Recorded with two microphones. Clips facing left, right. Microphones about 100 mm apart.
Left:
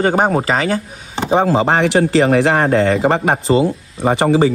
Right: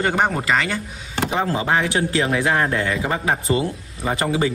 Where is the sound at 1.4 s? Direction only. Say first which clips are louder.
Left 7 dB; 65° left (ahead or behind).